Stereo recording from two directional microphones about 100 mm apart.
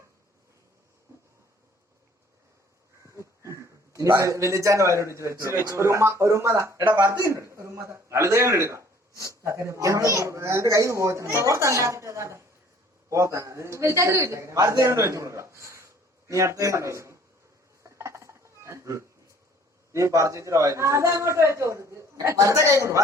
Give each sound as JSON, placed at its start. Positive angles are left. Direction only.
{"t": 3.2, "sound": "a man's voice", "side_deg": -30}
{"t": 17.8, "sound": "dishes", "side_deg": -30}
{"t": 19.9, "sound": "speech", "side_deg": -30}